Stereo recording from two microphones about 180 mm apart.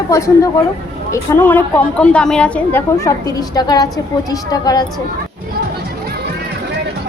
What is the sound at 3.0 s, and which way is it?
A woman's voice, 20° left (ahead or behind).